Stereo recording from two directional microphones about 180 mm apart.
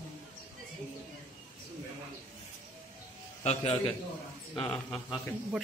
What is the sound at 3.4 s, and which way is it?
Speech, 30° left (ahead or behind).